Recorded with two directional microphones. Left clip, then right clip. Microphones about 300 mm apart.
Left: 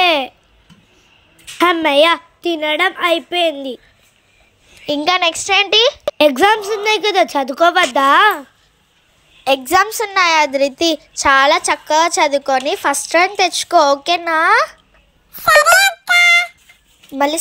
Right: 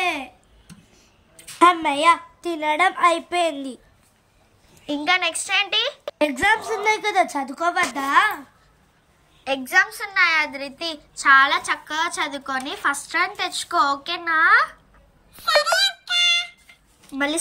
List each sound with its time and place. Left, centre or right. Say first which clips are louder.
0.0 s babbling: left 11 dB; centre
1.6 s a woman's voice: left 5 dB; centre
4.8 s speech: left 6 dB; centre
9.4 s speech: left 6 dB; centre
16.2 s music: left 9 dB; centre